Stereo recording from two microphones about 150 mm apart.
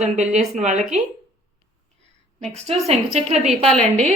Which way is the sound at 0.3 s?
50° right (ahead or behind).